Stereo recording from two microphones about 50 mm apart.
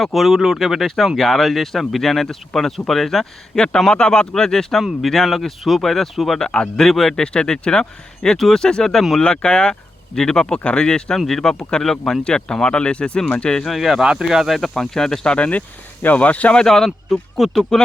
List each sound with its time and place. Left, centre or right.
0.0 s speech: centre
3.8 s speech: centre
4.8 s speech: centre
6.5 s speech: centre
13.7 s speech: centre
14.0 s speech: centre; by 16.6 s left
16.6 s speech: centre